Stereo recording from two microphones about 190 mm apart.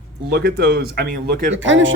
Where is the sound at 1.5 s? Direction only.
75° right (ahead or behind).